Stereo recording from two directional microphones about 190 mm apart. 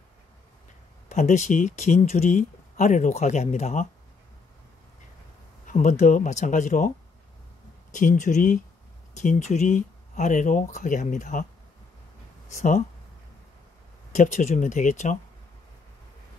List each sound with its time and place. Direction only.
1.0 s speech: 40° left (ahead or behind)
5.7 s speech: 40° left (ahead or behind)
7.9 s speech: 40° left (ahead or behind)
12.5 s speech: 40° left (ahead or behind)
14.1 s speech: 40° left (ahead or behind)